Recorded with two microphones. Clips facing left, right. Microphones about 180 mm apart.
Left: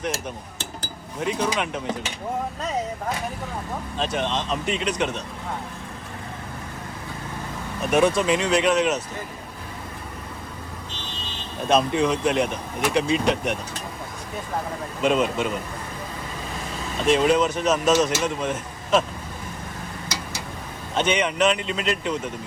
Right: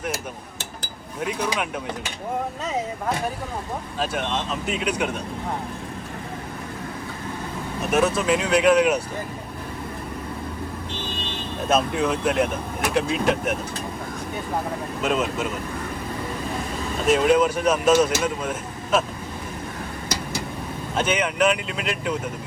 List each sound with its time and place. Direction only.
1.2 s speech: 5° right (ahead or behind)
3.9 s speech: 5° right (ahead or behind)
7.9 s speech: 5° right (ahead or behind)
11.7 s speech: 5° right (ahead or behind)
15.0 s speech: centre (ahead or behind)
17.1 s speech: 5° right (ahead or behind)
20.9 s speech: 5° right (ahead or behind)